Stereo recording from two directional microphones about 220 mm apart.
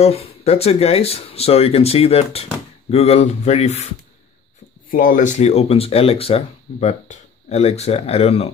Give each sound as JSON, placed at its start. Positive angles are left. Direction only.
{"t": 0.0, "sound": "speech", "side_deg": 25}
{"t": 4.9, "sound": "speech", "side_deg": 35}